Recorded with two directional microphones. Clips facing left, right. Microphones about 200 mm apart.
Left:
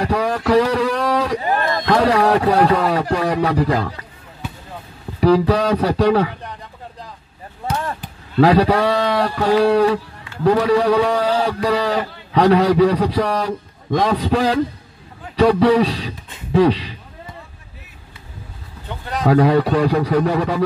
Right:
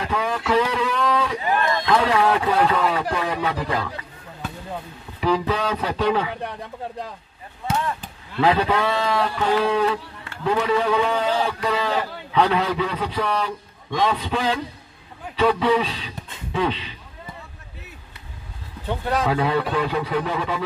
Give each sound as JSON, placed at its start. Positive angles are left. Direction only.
{"t": 0.0, "sound": "speech", "side_deg": 40}
{"t": 5.2, "sound": "a man's voice", "side_deg": 40}
{"t": 7.8, "sound": "a man's voice", "side_deg": 40}
{"t": 19.2, "sound": "a man's voice", "side_deg": 40}